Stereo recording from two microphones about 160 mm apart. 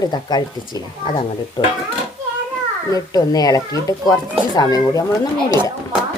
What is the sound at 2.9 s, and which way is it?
A woman's voice, 25° left (ahead or behind).